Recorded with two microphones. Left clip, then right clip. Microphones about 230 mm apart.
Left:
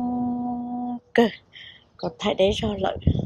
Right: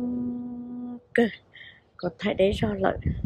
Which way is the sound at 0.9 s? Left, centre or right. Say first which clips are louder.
Left 3 dB; centre.